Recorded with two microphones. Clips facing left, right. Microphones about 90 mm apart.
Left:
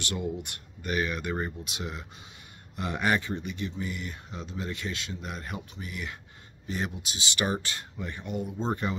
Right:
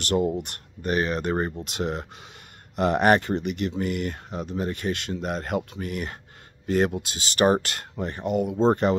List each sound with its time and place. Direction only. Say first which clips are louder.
0.0 s speech: right 9 dB; 50° right (ahead or behind); by 4.2 s 70° right (ahead or behind)
4.3 s speech: right 7 dB; 50° right (ahead or behind)
7.2 s speech: right 10 dB; 50° right (ahead or behind)
7.6 s speech: right 6 dB; 70° right (ahead or behind)
8.1 s speech: right 10 dB; 50° right (ahead or behind)
8.4 s speech: right 10 dB; 85° right